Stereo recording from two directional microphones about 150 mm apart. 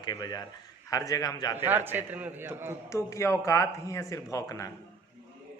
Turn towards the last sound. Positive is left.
turn(degrees=25)  # may be behind; listen again after turning